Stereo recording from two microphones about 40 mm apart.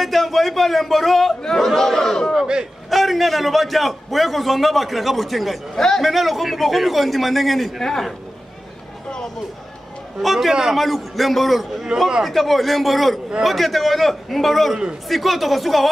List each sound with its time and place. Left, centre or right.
0.0 s a man's voice: centre
2.3 s speech: right
2.9 s a man's voice: centre
5.8 s speech: centre
6.0 s a man's voice: centre
10.2 s a man's voice: centre
11.9 s speech: centre
12.3 s a man's voice: centre